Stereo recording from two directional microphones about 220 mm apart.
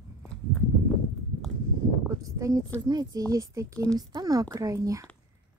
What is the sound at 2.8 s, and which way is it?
Speech, 20° right (ahead or behind).